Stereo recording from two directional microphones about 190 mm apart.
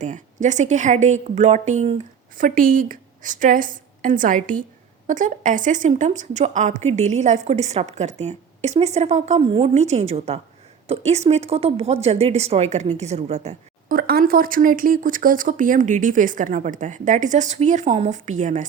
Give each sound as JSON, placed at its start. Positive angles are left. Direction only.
{"t": 0.0, "sound": "a woman's voice", "side_deg": -40}